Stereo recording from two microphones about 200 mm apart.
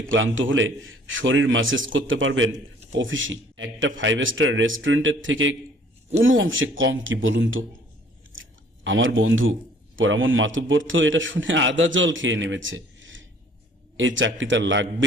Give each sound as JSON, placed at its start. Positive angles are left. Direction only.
{"t": 0.1, "sound": "a man's voice", "side_deg": -75}